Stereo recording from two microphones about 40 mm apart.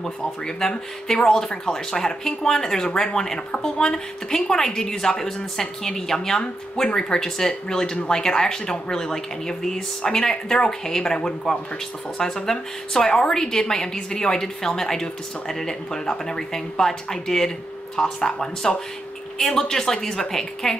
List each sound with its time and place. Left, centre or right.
0.7 s a woman's voice: centre